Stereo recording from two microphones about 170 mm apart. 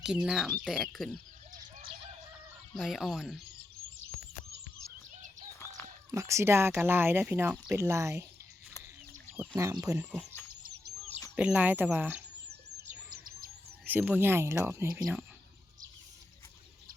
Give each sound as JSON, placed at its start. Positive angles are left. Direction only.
{"t": 0.0, "sound": "speech", "side_deg": -5}
{"t": 2.7, "sound": "speech", "side_deg": 0}
{"t": 5.1, "sound": "bird", "side_deg": -45}
{"t": 5.5, "sound": "a sound", "side_deg": 15}
{"t": 6.1, "sound": "speech", "side_deg": -15}
{"t": 9.6, "sound": "speech", "side_deg": -20}
{"t": 10.0, "sound": "speech", "side_deg": -10}
{"t": 11.3, "sound": "speech", "side_deg": -10}
{"t": 13.1, "sound": "bird", "side_deg": -60}
{"t": 13.8, "sound": "speech", "side_deg": -10}
{"t": 14.9, "sound": "speech", "side_deg": -5}